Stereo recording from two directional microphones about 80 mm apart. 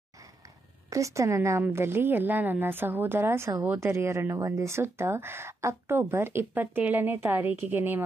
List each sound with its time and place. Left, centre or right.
0.8 s a woman's voice: right